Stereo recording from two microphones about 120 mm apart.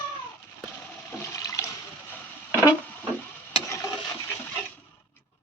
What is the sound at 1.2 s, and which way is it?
Water, 25° left (ahead or behind).